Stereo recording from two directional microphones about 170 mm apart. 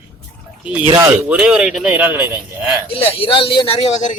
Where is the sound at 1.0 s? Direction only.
5° right (ahead or behind).